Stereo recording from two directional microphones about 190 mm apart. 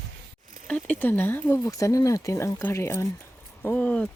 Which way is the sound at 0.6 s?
5° left (ahead or behind).